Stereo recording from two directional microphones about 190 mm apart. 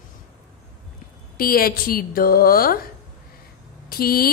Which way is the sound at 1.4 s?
50° left (ahead or behind).